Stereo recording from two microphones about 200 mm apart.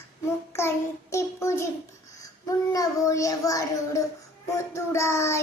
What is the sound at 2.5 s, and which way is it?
A child's voice, 15° left (ahead or behind).